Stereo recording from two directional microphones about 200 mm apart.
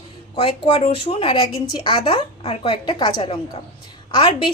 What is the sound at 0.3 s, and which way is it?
A woman's voice, 25° left (ahead or behind).